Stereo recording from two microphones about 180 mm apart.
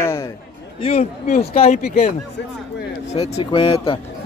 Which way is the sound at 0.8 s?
35° left (ahead or behind).